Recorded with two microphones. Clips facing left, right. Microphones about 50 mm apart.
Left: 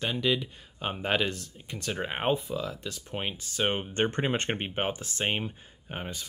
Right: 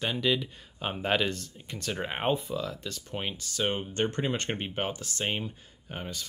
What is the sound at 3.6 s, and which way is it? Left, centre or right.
Speech, left.